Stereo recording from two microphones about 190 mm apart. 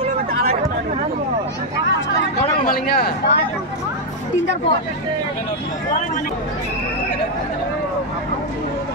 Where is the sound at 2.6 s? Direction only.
50° left (ahead or behind).